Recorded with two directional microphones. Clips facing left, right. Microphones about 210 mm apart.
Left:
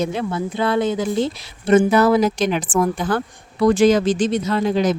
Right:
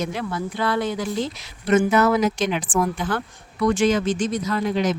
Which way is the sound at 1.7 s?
35° left (ahead or behind).